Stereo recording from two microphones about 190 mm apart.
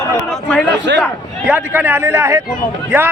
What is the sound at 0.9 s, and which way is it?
Speech, 65° right (ahead or behind).